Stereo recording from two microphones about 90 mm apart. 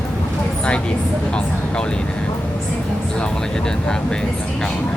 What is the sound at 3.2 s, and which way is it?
Speech, 10° left (ahead or behind).